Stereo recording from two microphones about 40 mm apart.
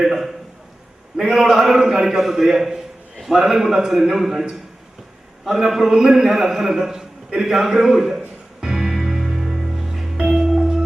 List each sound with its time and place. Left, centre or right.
0.0 s a sound: centre
1.1 s a man's voice: centre
8.6 s music: centre